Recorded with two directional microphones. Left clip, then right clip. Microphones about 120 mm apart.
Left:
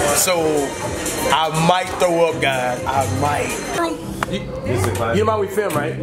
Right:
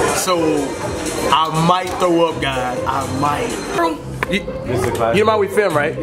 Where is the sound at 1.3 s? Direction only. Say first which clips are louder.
Right 2 dB; 10° left (ahead or behind).